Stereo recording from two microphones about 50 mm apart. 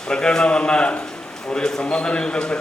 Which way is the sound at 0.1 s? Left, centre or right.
Centre.